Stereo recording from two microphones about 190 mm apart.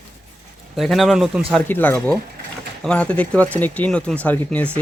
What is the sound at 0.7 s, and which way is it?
Speech, centre (ahead or behind).